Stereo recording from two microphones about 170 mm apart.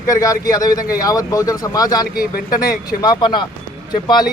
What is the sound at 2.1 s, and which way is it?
Speech, 60° left (ahead or behind).